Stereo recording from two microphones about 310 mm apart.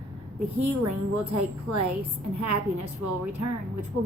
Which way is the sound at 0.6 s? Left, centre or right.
Right.